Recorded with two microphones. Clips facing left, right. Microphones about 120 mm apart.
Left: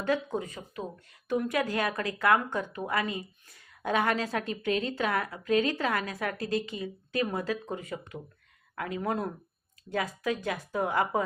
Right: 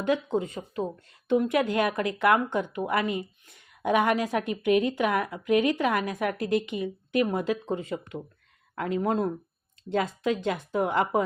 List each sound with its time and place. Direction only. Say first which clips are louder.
0.0 s speech: right 4 dB; 20° right (ahead or behind)